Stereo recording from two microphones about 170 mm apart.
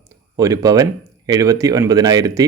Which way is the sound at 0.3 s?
20° right (ahead or behind).